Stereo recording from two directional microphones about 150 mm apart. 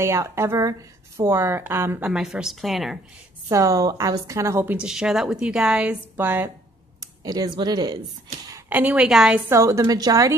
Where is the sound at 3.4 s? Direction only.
20° right (ahead or behind).